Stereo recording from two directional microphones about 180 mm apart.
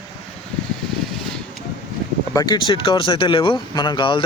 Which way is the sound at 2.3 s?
25° left (ahead or behind).